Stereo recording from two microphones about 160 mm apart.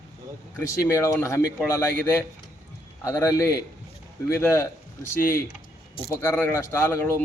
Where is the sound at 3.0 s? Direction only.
20° left (ahead or behind).